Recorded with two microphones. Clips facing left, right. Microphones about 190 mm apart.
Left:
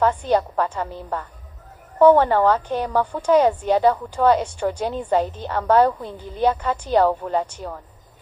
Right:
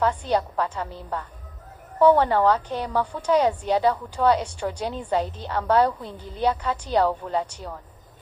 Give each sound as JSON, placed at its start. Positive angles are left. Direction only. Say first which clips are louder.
{"t": 0.0, "sound": "a woman's voice", "louder": "left 4 dB", "side_deg": 50}